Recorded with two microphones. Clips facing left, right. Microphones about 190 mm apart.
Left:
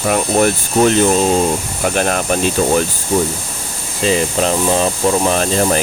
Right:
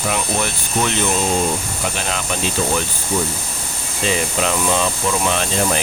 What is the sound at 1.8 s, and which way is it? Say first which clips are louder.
Speech: left 11 dB; 50° left (ahead or behind).